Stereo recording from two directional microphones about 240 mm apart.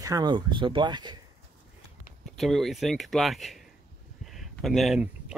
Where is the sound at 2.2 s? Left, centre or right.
Centre.